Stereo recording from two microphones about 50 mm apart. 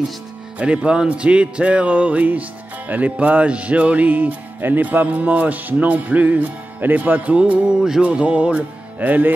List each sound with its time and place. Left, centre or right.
0.6 s speech: right
4.6 s music: right
7.6 s music: centre
8.0 s speech: right